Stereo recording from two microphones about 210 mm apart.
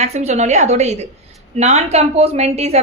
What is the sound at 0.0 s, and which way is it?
A woman's voice, 30° right (ahead or behind).